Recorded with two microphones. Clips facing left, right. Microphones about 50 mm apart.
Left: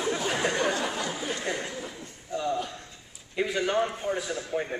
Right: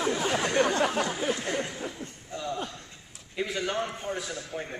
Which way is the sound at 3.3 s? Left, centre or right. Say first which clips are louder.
Left 4 dB; centre.